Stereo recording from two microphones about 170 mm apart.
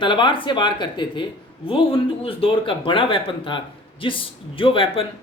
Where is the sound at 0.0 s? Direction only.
30° left (ahead or behind).